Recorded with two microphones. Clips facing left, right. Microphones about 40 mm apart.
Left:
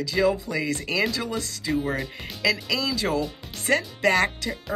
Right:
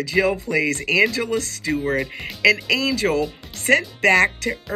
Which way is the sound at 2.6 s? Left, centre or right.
Right.